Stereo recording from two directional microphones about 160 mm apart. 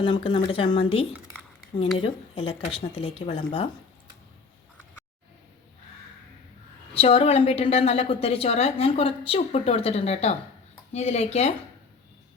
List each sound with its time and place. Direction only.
0.0 s a woman's voice: 35° left (ahead or behind)
6.9 s a woman's voice: 35° left (ahead or behind)